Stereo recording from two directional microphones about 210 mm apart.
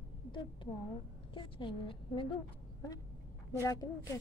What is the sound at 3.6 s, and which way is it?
Speech, 15° left (ahead or behind).